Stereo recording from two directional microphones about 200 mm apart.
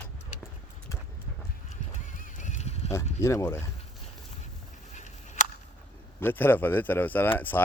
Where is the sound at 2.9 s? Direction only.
15° left (ahead or behind).